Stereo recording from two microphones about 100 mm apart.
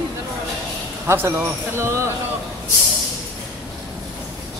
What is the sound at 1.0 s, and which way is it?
Speech, 25° right (ahead or behind).